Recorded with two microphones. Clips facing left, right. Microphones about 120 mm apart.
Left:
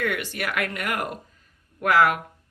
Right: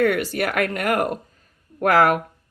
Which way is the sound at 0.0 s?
45° right (ahead or behind).